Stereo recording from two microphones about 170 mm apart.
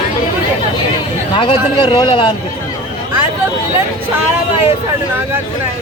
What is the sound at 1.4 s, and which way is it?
Speech, 30° left (ahead or behind).